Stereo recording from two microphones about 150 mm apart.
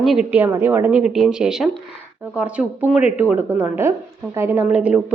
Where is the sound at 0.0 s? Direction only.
5° right (ahead or behind).